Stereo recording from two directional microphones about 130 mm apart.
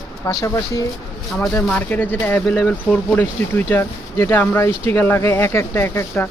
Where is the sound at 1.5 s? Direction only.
10° left (ahead or behind).